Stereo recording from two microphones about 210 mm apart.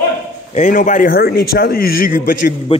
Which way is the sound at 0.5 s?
35° left (ahead or behind).